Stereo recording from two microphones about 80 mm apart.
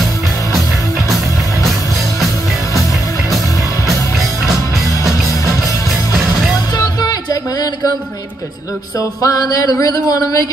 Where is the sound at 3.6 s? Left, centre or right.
Left.